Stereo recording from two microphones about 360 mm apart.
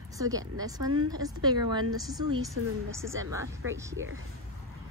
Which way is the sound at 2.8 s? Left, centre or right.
Centre.